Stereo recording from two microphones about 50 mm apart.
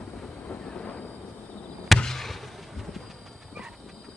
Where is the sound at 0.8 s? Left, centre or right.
Left.